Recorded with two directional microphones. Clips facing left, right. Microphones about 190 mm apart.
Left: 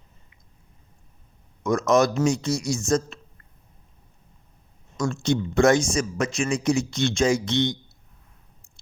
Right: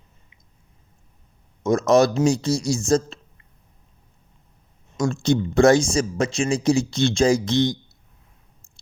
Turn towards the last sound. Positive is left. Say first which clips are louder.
# right 3 dB
turn(degrees=-35)  # may be behind; listen again after turning